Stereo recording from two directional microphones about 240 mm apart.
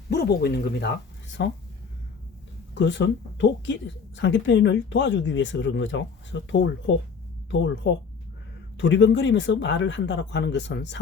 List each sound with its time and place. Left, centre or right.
0.1 s speech: left
2.7 s speech: left